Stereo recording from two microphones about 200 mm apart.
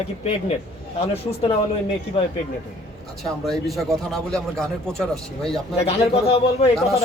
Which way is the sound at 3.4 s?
Centre (ahead or behind).